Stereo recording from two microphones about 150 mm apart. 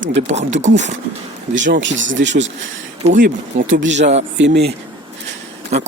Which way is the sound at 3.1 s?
65° right (ahead or behind).